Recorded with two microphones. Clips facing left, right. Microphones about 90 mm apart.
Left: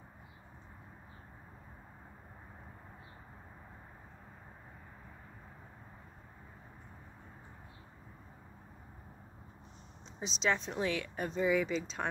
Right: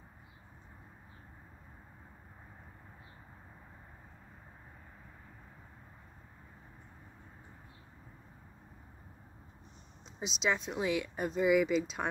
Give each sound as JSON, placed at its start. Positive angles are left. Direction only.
{"t": 10.2, "sound": "speech", "side_deg": -5}